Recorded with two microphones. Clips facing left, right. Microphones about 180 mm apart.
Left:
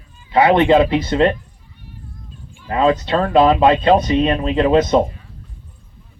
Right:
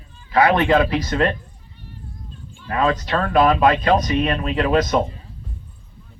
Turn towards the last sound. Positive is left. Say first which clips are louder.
# left 5 dB
turn(degrees=25)  # may be behind; listen again after turning